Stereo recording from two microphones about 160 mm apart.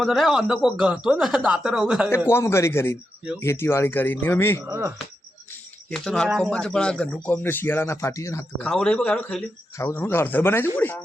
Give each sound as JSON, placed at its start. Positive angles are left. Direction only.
{"t": 0.0, "sound": "speech", "side_deg": 0}
{"t": 2.0, "sound": "speech", "side_deg": 15}
{"t": 4.6, "sound": "speech", "side_deg": -15}
{"t": 5.9, "sound": "speech", "side_deg": 5}
{"t": 8.7, "sound": "speech", "side_deg": 5}